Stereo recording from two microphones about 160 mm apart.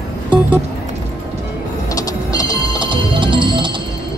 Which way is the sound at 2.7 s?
30° right (ahead or behind).